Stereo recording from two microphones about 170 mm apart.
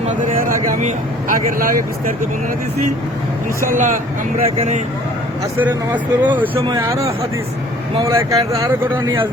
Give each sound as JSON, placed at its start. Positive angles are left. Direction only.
{"t": 0.2, "sound": "speech", "side_deg": -50}
{"t": 3.6, "sound": "speech", "side_deg": -50}
{"t": 4.4, "sound": "speech", "side_deg": -35}
{"t": 5.5, "sound": "speech", "side_deg": -10}
{"t": 6.5, "sound": "speech", "side_deg": -25}